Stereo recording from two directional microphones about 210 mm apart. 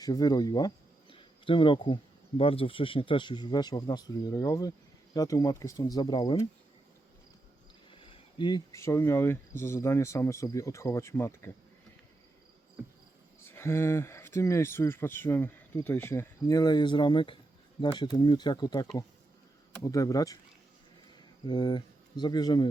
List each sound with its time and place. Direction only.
0.0 s speech: 15° left (ahead or behind)
1.1 s a sound: 25° left (ahead or behind)
2.4 s speech: 25° left (ahead or behind)
7.9 s speech: 25° left (ahead or behind)
13.4 s speech: 10° left (ahead or behind)
21.4 s speech: 20° left (ahead or behind)